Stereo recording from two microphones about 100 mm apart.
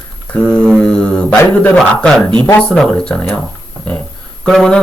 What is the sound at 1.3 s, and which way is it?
Mantra, 20° left (ahead or behind).